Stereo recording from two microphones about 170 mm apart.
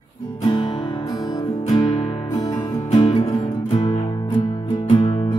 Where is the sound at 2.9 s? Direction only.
35° left (ahead or behind).